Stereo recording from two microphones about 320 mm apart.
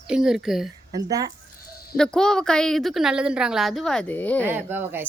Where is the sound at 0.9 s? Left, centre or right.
Centre.